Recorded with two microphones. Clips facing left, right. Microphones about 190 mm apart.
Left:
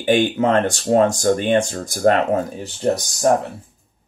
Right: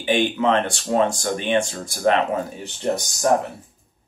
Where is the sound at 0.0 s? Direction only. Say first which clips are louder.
Left 3 dB; 45° left (ahead or behind).